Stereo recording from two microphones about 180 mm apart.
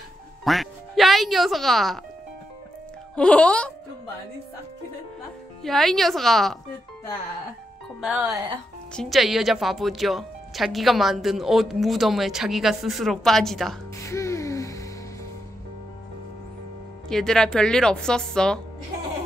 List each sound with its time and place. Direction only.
0.4 s speech: centre (ahead or behind)
3.2 s speech: 5° left (ahead or behind)
5.6 s speech: centre (ahead or behind)
8.0 s speech: 10° right (ahead or behind)
14.0 s music: 15° left (ahead or behind)
17.1 s speech: 5° left (ahead or behind)